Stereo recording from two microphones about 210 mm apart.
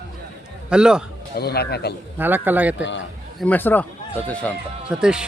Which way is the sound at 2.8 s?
60° left (ahead or behind).